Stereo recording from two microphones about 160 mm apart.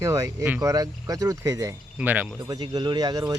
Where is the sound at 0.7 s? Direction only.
20° right (ahead or behind).